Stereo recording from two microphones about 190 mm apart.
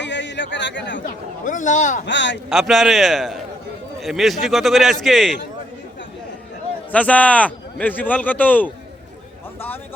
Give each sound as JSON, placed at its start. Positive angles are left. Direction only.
{"t": 0.0, "sound": "a sound", "side_deg": 70}
{"t": 1.5, "sound": "speech", "side_deg": 40}
{"t": 2.0, "sound": "speech", "side_deg": 70}
{"t": 2.5, "sound": "a man's voice", "side_deg": 0}
{"t": 6.9, "sound": "a man's voice", "side_deg": 10}